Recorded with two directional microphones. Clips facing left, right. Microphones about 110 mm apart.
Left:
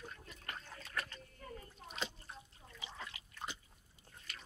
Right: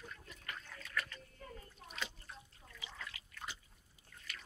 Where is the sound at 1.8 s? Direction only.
25° left (ahead or behind).